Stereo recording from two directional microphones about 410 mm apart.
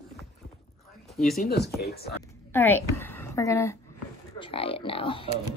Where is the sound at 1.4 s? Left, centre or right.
Left.